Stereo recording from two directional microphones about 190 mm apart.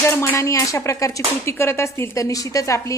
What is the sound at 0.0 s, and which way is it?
A woman's voice, 15° left (ahead or behind).